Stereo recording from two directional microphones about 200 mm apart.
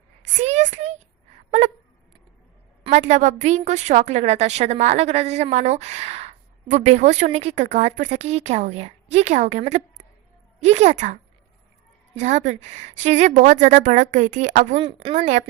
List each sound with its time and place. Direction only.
0.2 s a sound: 35° right (ahead or behind)
2.8 s a woman's voice: 35° right (ahead or behind)
12.2 s a woman's voice: 35° right (ahead or behind)
14.8 s a woman's voice: 25° right (ahead or behind)
15.1 s a woman's voice: 40° right (ahead or behind)